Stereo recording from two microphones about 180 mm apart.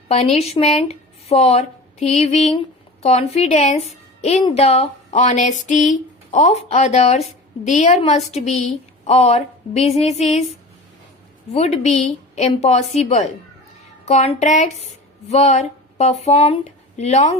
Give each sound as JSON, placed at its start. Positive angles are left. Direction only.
{"t": 0.1, "sound": "speech", "side_deg": 35}
{"t": 11.5, "sound": "speech", "side_deg": 40}